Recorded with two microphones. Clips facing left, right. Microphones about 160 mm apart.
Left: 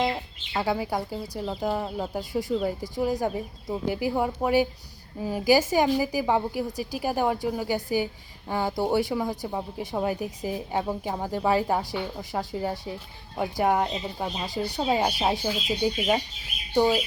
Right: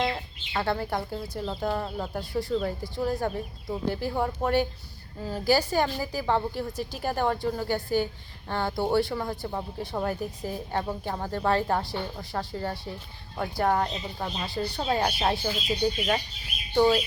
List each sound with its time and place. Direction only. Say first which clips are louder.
0.0 s a woman's voice: left 2 dB; 10° left (ahead or behind)